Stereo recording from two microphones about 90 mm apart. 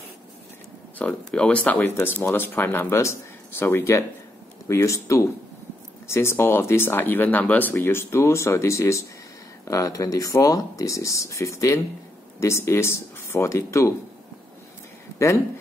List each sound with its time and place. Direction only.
0.9 s speech: 15° left (ahead or behind); by 13.9 s 35° left (ahead or behind)
15.1 s speech: 35° left (ahead or behind)